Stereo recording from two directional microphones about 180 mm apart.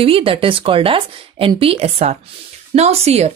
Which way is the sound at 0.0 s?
30° right (ahead or behind).